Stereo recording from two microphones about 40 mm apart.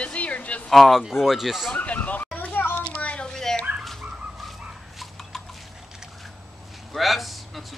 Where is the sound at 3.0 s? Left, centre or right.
Left.